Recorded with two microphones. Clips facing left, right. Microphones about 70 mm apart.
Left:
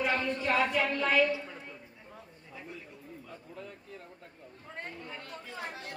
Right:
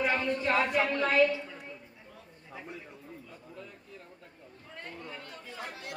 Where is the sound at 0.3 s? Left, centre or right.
Right.